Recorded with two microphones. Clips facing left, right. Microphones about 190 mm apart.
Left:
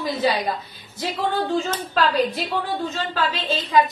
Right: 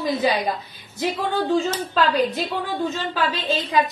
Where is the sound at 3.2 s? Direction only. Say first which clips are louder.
Right 1 dB; 15° right (ahead or behind).